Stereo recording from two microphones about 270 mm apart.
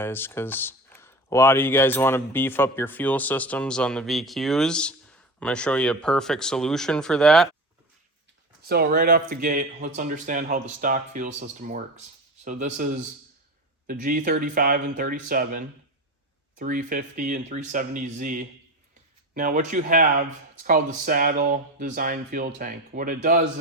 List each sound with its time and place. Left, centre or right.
0.0 s speech: centre
8.6 s speech: right